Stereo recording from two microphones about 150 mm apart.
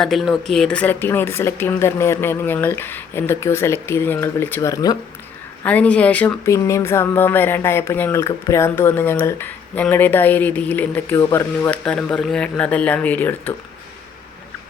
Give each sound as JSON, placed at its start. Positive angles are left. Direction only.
{"t": 0.0, "sound": "speech", "side_deg": 0}
{"t": 5.6, "sound": "speech", "side_deg": 10}
{"t": 11.9, "sound": "speech", "side_deg": 5}